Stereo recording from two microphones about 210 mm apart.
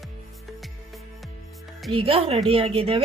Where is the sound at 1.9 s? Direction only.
25° right (ahead or behind).